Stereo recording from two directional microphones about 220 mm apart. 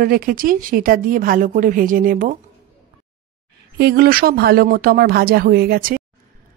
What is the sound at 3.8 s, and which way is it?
Speech, 45° right (ahead or behind).